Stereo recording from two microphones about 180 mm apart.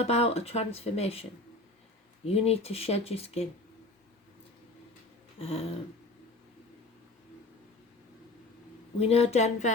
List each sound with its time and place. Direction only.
0.0 s speech: 35° left (ahead or behind)
5.4 s a sound: 35° left (ahead or behind)
9.0 s speech: 35° left (ahead or behind)